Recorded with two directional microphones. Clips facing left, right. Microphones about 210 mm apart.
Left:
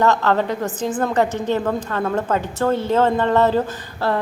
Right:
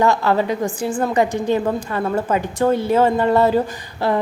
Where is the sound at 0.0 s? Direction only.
10° right (ahead or behind).